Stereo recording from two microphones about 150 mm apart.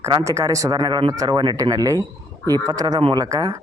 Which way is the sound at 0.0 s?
20° right (ahead or behind).